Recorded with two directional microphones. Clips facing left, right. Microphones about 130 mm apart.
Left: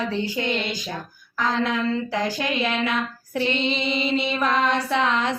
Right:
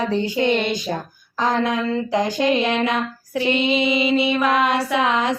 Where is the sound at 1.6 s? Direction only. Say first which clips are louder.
Right 3 dB; 20° right (ahead or behind).